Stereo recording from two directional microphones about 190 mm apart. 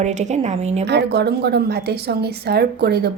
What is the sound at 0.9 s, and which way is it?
A woman's voice, 60° right (ahead or behind).